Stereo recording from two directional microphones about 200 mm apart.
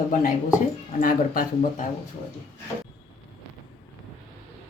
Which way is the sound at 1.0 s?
45° left (ahead or behind).